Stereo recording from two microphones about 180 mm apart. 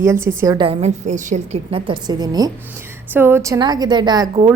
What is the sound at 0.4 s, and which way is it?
Speech, 25° right (ahead or behind).